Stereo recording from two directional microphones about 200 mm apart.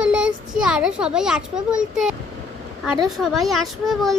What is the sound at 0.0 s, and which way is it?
A child's voice, 5° right (ahead or behind).